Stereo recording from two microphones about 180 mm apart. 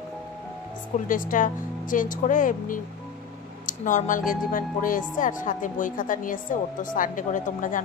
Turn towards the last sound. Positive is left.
turn(degrees=45)  # may be behind; listen again after turning